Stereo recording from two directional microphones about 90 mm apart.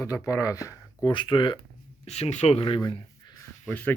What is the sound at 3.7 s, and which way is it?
Speech, 20° left (ahead or behind).